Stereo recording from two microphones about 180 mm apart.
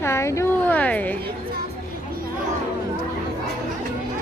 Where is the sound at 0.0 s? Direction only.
15° left (ahead or behind).